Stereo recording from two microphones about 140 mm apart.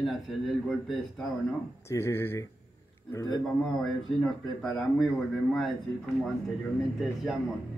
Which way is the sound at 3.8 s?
5° left (ahead or behind).